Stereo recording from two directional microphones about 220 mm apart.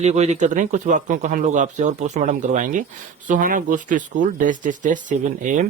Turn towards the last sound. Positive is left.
turn(degrees=-35)  # may be behind; listen again after turning